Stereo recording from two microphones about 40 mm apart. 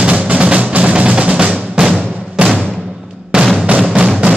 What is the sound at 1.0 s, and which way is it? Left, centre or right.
Music, right.